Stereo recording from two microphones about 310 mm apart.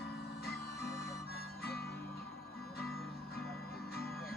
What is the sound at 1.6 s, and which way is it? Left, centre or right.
Music, left.